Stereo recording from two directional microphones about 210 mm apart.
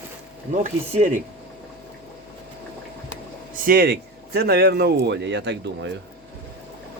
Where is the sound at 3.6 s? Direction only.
45° right (ahead or behind).